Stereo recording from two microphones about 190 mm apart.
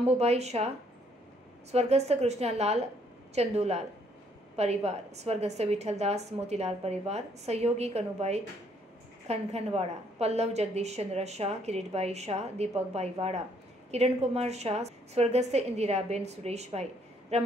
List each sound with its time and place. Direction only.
0.0 s a woman's voice: 35° right (ahead or behind)